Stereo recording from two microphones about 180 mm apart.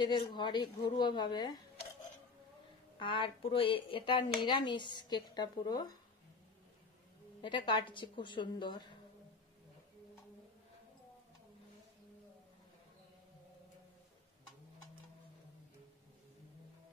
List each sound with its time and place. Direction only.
0.0 s speech: 25° left (ahead or behind)
3.0 s speech: 30° left (ahead or behind)
7.4 s speech: 25° left (ahead or behind)